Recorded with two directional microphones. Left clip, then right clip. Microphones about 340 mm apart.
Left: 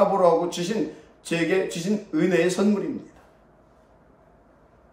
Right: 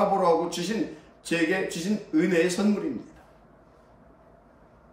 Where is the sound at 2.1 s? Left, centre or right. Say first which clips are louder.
Left 1 dB; centre.